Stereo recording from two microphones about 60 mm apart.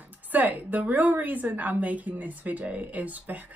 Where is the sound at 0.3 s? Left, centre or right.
Right.